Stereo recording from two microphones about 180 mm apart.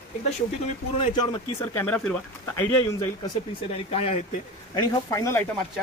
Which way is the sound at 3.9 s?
35° left (ahead or behind).